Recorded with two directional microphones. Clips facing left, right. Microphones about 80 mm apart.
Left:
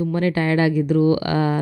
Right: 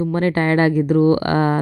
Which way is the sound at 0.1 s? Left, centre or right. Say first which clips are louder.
Right 3 dB; right.